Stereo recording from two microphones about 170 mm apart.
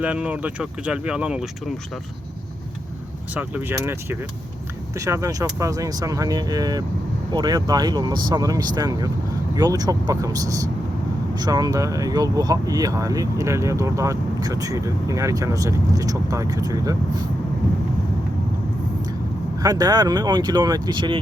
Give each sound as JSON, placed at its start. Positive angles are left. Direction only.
{"t": 0.0, "sound": "speech", "side_deg": -5}
{"t": 3.3, "sound": "speech", "side_deg": -10}
{"t": 19.5, "sound": "speech", "side_deg": -20}